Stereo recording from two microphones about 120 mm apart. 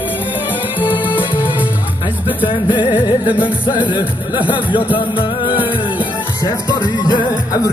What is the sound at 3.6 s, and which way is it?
Music, 40° left (ahead or behind).